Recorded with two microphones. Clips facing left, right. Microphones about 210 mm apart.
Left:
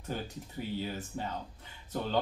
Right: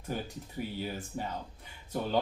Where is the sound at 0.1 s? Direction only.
10° right (ahead or behind).